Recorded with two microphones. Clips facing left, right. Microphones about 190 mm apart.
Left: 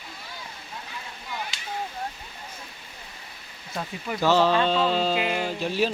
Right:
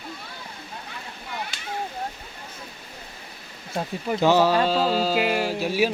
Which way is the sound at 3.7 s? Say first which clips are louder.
Right 5 dB; 30° right (ahead or behind).